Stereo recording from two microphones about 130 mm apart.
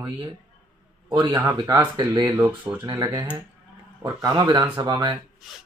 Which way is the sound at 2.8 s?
30° right (ahead or behind).